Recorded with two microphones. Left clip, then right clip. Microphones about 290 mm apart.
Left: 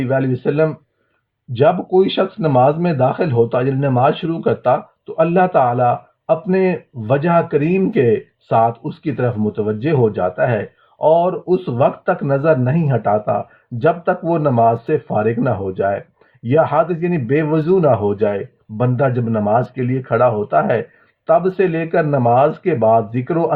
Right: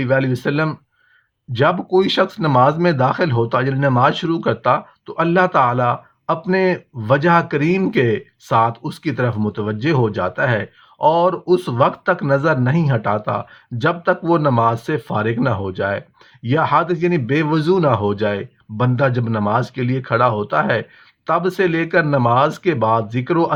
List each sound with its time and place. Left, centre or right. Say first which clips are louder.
0.0 s speech: even; right
2.0 s speech: left 1 dB; right